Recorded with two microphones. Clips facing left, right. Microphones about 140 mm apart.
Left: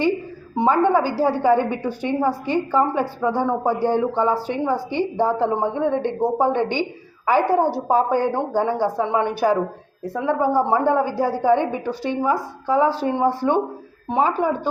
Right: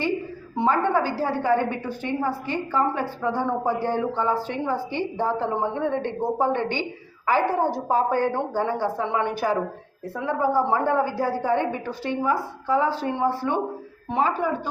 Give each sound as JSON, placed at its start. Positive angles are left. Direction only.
{"t": 0.5, "sound": "a woman's voice", "side_deg": 15}